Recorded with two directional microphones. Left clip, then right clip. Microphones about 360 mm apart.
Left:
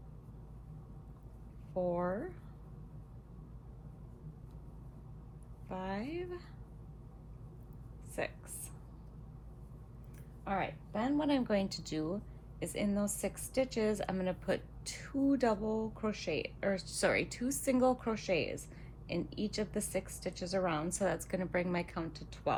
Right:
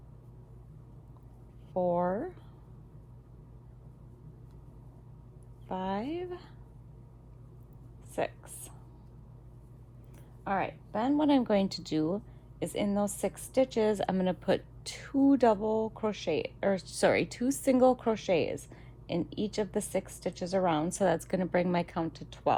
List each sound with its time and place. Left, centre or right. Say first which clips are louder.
1.7 s a woman's voice: right 6 dB; centre
5.6 s a woman's voice: right 6 dB; right
8.1 s a sound: right 6 dB; right
10.4 s a woman's voice: right 5 dB; right